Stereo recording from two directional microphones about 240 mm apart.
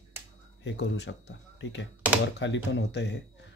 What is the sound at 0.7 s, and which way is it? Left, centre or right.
Speech, left.